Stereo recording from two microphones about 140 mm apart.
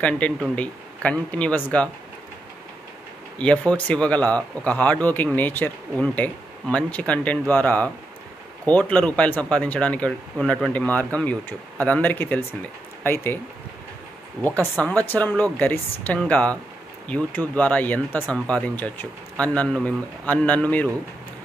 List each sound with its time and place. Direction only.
0.2 s speech: 10° left (ahead or behind)
3.3 s speech: 10° left (ahead or behind)
14.4 s speech: 15° left (ahead or behind)